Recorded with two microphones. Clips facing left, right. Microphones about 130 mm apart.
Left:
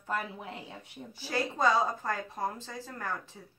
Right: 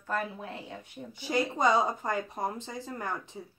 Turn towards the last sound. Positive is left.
turn(degrees=-20)  # may be behind; listen again after turning